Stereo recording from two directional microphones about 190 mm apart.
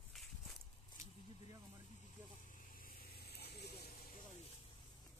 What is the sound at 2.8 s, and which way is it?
Vehicle, 55° left (ahead or behind).